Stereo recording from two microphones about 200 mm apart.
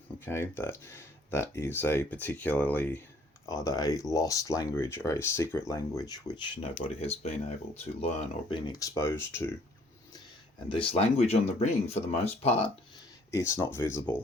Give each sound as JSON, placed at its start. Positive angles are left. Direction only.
{"t": 0.3, "sound": "speech", "side_deg": 10}
{"t": 10.7, "sound": "speech", "side_deg": 30}
{"t": 13.3, "sound": "speech", "side_deg": 15}